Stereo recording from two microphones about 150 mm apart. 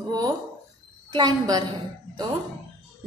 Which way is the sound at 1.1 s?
25° right (ahead or behind).